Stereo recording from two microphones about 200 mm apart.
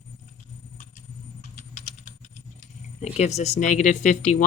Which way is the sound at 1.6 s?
40° left (ahead or behind).